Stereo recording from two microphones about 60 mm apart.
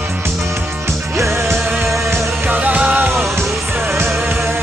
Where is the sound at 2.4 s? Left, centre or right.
Right.